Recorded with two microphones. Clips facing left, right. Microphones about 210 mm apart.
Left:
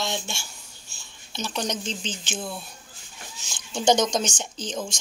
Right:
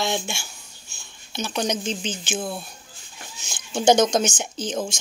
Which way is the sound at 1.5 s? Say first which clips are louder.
Right 5 dB; 10° right (ahead or behind).